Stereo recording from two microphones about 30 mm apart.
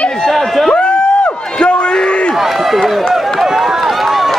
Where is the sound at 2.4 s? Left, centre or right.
Centre.